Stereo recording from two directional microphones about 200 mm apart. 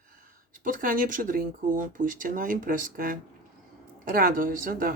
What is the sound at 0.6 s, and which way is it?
Speech, 45° right (ahead or behind).